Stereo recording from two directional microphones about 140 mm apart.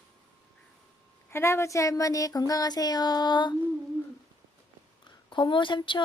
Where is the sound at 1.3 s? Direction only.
20° left (ahead or behind).